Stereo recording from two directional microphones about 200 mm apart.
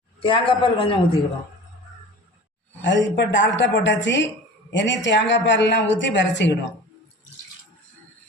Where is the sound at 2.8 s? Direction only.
60° left (ahead or behind).